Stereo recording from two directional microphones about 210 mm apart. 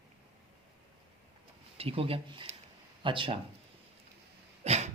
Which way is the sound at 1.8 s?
25° right (ahead or behind).